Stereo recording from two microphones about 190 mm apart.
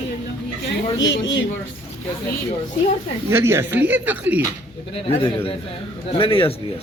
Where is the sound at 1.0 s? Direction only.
75° left (ahead or behind).